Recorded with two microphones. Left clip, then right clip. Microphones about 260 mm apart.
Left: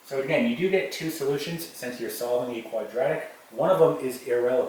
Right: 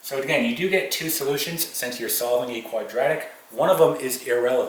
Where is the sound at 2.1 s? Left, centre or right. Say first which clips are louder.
Right 4 dB; centre.